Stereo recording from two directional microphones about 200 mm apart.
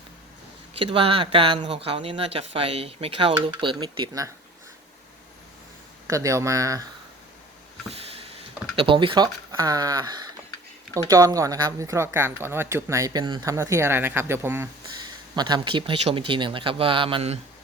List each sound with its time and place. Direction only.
0.7 s speech: 30° right (ahead or behind)
6.1 s speech: 15° right (ahead or behind)
7.9 s a sound: 30° right (ahead or behind)
8.7 s speech: 25° right (ahead or behind)